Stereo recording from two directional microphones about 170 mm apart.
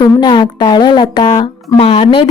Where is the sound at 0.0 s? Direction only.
25° left (ahead or behind).